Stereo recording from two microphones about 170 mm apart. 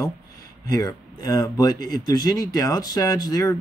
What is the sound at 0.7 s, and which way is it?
Speech, 20° left (ahead or behind).